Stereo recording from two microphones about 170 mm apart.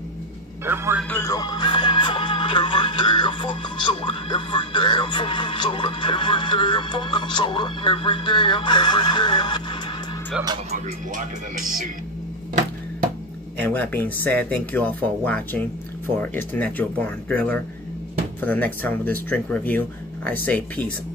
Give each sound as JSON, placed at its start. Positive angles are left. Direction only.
{"t": 0.7, "sound": "a man's voice", "side_deg": -15}
{"t": 1.1, "sound": "music", "side_deg": 20}
{"t": 13.6, "sound": "speech", "side_deg": 10}